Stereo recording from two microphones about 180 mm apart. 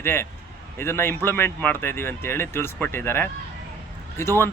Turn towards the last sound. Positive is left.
turn(degrees=15)  # may be behind; listen again after turning